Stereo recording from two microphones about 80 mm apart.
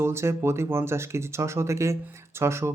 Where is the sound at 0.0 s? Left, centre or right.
Right.